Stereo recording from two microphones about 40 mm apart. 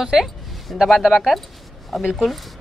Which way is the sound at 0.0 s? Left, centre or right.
Centre.